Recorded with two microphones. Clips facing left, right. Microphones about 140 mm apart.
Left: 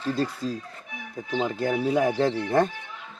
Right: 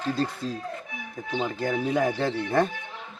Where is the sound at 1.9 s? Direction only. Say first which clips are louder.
Left 3 dB; 10° left (ahead or behind).